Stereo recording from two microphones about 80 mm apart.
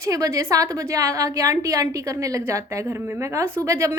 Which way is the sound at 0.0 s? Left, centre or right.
Right.